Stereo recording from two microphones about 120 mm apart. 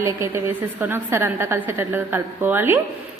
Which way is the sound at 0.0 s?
25° right (ahead or behind).